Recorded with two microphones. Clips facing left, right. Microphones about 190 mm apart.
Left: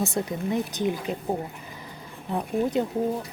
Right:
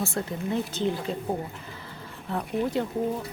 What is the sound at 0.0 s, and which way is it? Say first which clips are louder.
A woman's voice: left 3 dB; 15° left (ahead or behind).